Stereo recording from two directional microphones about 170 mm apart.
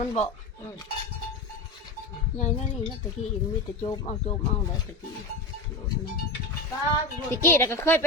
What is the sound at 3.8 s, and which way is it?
Speech, 30° left (ahead or behind).